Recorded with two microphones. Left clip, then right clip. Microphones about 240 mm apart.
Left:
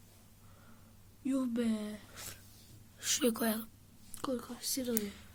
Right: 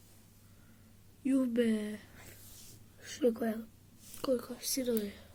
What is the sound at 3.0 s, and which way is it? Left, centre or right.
Speech, left.